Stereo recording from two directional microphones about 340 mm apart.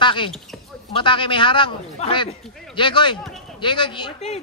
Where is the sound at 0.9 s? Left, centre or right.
Centre.